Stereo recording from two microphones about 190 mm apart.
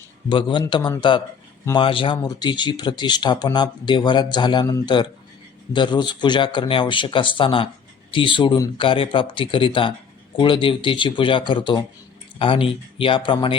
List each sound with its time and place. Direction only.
0.3 s speech: 25° left (ahead or behind)